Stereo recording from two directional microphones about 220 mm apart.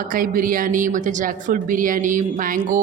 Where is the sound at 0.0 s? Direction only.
40° right (ahead or behind).